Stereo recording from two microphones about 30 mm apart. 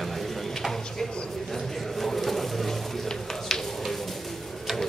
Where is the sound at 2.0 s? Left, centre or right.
Centre.